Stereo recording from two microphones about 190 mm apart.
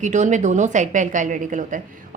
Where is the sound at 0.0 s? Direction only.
40° right (ahead or behind).